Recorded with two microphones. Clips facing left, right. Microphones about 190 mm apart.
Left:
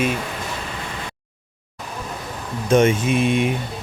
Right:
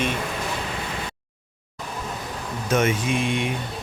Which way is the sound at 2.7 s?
30° left (ahead or behind).